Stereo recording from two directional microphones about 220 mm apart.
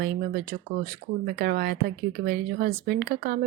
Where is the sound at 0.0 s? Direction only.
45° right (ahead or behind).